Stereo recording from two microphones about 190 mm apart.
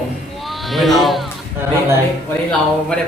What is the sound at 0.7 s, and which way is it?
Speech, centre (ahead or behind).